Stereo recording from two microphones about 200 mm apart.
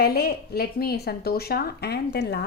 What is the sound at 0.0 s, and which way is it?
A woman's voice, 50° left (ahead or behind).